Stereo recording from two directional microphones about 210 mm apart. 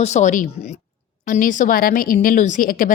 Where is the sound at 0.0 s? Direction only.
35° left (ahead or behind).